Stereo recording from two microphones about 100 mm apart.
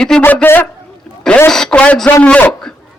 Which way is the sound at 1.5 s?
5° left (ahead or behind).